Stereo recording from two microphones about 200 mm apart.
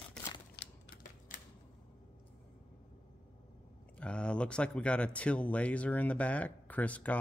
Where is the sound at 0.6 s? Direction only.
60° left (ahead or behind).